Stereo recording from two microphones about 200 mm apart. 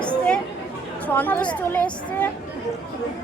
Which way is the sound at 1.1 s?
10° left (ahead or behind).